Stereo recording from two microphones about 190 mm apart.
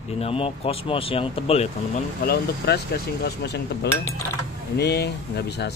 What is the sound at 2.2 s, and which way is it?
Speech, 50° left (ahead or behind).